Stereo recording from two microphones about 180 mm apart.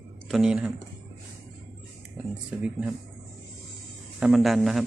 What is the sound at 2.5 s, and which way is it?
Speech, 5° right (ahead or behind).